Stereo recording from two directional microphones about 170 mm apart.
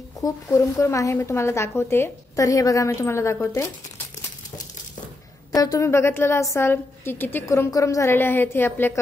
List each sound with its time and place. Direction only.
0.2 s a woman's voice: 20° left (ahead or behind)
5.5 s a woman's voice: 20° left (ahead or behind)